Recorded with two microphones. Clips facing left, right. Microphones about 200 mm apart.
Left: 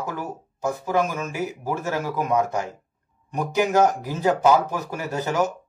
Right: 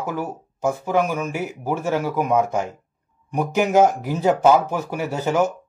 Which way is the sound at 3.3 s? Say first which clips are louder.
Right 3 dB; 10° right (ahead or behind).